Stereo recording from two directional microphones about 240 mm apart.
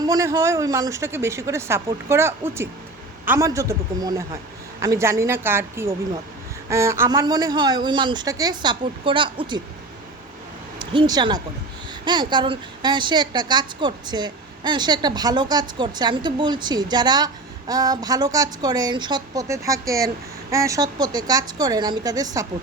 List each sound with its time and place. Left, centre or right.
0.0 s a woman's voice: centre
10.8 s a woman's voice: centre